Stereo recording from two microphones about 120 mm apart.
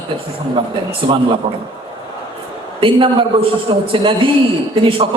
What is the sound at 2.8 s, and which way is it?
A man's voice, 45° right (ahead or behind).